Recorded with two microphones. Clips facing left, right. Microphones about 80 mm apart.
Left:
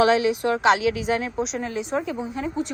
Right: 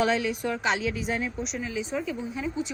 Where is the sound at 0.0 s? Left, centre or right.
Left.